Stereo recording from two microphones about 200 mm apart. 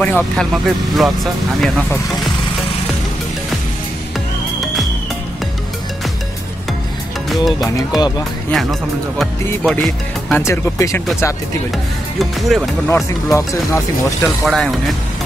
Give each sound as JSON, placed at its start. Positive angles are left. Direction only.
{"t": 0.0, "sound": "speech", "side_deg": 5}
{"t": 7.2, "sound": "speech", "side_deg": 0}
{"t": 7.7, "sound": "speech", "side_deg": 20}
{"t": 9.2, "sound": "speech", "side_deg": 5}
{"t": 10.3, "sound": "speech", "side_deg": 15}
{"t": 12.2, "sound": "speech", "side_deg": 0}
{"t": 12.8, "sound": "speech", "side_deg": 15}
{"t": 14.2, "sound": "speech", "side_deg": 0}